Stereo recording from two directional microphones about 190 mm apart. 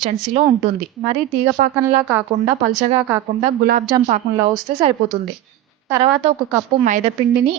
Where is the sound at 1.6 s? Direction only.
40° right (ahead or behind).